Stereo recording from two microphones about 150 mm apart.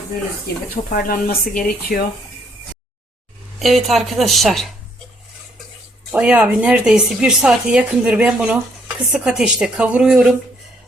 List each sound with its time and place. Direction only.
0.9 s speech: 75° left (ahead or behind)
3.6 s speech: centre (ahead or behind)
6.1 s a woman's voice: 10° right (ahead or behind)